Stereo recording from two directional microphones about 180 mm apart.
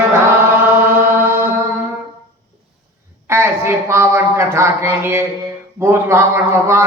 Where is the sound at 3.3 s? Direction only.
15° right (ahead or behind).